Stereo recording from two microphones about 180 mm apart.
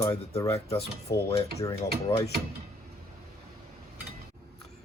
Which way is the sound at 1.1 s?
35° left (ahead or behind).